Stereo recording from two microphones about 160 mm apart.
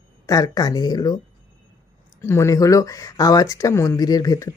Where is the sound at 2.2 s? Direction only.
15° left (ahead or behind).